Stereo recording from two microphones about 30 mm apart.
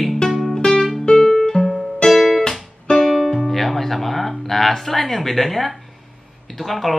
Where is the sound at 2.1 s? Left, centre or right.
Centre.